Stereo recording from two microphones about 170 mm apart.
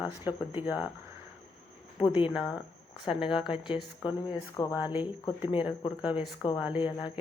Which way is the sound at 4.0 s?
25° left (ahead or behind).